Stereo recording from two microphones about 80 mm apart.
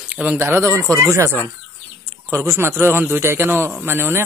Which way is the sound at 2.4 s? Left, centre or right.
Right.